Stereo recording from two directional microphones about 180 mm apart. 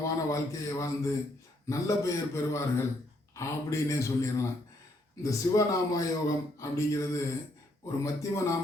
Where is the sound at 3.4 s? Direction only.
15° left (ahead or behind).